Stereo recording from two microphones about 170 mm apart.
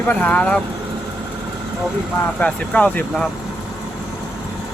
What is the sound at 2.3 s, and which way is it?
Speech, 5° left (ahead or behind).